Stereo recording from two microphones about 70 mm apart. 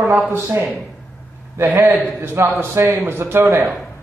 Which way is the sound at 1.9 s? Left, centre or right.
Centre.